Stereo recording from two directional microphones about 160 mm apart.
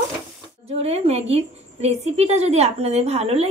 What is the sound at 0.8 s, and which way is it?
A woman's voice, 40° right (ahead or behind).